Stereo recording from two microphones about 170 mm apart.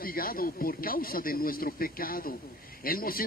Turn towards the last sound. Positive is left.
turn(degrees=60)  # may be behind; listen again after turning